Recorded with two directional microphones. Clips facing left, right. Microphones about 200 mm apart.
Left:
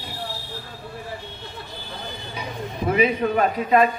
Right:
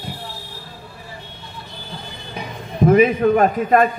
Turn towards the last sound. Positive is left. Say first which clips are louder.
# right 3 dB
turn(degrees=-50)  # may be behind; listen again after turning